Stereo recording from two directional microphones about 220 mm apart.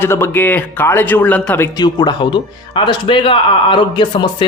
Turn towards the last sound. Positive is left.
turn(degrees=20)  # may be behind; listen again after turning